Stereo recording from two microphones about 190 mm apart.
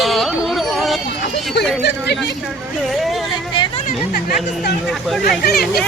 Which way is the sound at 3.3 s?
25° left (ahead or behind).